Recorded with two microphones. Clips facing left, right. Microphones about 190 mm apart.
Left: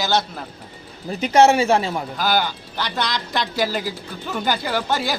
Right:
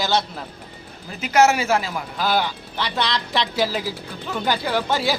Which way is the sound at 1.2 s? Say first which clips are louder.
Left 3 dB; 30° left (ahead or behind).